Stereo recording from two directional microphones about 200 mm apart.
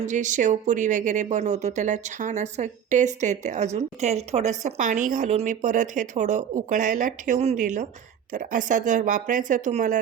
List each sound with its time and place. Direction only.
0.0 s speech: 40° right (ahead or behind)